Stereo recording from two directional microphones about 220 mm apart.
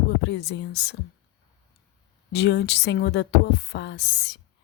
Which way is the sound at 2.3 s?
50° left (ahead or behind).